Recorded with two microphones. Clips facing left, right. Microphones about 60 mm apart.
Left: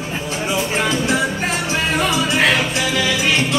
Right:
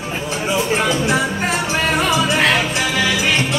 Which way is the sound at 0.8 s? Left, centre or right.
Centre.